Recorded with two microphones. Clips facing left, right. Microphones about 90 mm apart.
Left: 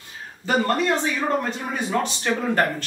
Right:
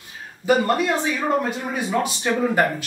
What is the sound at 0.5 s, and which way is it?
Speech, 5° right (ahead or behind).